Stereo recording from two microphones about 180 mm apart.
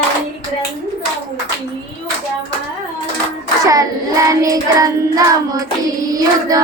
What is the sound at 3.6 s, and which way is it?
Child singing, 20° right (ahead or behind).